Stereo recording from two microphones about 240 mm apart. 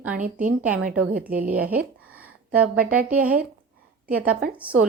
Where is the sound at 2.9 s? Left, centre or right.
Centre.